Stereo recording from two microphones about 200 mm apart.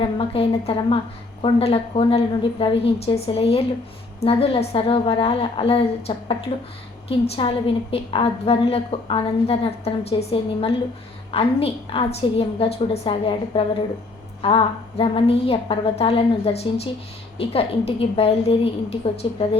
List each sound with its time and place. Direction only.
0.0 s a woman's voice: 30° left (ahead or behind)